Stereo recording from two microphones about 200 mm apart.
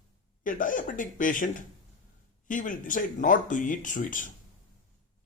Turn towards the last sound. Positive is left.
turn(degrees=40)  # may be behind; listen again after turning